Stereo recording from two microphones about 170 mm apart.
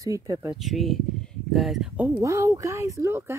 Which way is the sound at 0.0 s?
20° right (ahead or behind).